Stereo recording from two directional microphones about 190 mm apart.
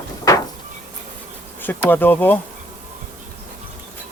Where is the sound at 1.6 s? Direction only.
10° left (ahead or behind).